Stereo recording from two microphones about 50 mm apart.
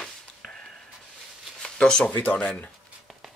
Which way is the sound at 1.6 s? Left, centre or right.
Centre.